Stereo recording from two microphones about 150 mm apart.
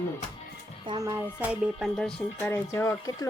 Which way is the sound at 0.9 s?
25° right (ahead or behind).